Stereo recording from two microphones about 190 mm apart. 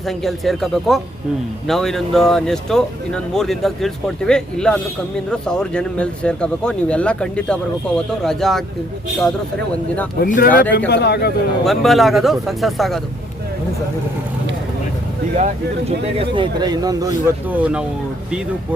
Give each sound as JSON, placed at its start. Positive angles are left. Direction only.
{"t": 0.0, "sound": "speech", "side_deg": 0}
{"t": 10.2, "sound": "speech", "side_deg": 50}
{"t": 10.8, "sound": "speech", "side_deg": 60}
{"t": 11.6, "sound": "speech", "side_deg": 0}
{"t": 15.4, "sound": "speech", "side_deg": -35}
{"t": 17.5, "sound": "speech", "side_deg": -5}